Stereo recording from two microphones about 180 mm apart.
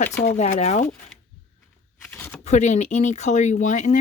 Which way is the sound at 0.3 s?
35° left (ahead or behind).